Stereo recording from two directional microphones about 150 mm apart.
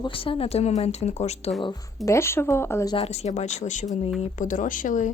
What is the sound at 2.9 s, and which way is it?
Speech, 45° left (ahead or behind).